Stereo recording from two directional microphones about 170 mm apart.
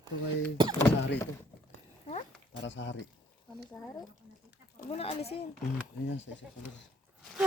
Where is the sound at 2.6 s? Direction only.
90° left.